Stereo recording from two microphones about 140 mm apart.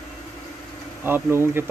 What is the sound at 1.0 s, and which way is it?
Speech, 15° right (ahead or behind).